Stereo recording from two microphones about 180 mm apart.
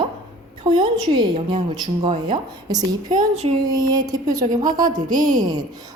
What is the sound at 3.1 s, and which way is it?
Speech, 40° right (ahead or behind).